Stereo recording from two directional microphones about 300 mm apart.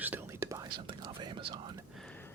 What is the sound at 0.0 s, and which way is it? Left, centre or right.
Whispering, centre.